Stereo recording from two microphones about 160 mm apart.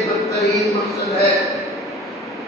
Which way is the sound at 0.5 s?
Centre (ahead or behind).